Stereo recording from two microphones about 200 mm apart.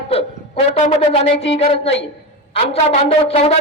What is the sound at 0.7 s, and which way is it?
Music, 30° left (ahead or behind).